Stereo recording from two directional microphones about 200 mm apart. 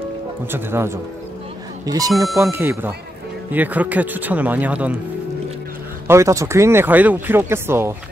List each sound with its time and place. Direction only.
0.5 s speech: 10° right (ahead or behind)
6.0 s speech: 15° right (ahead or behind)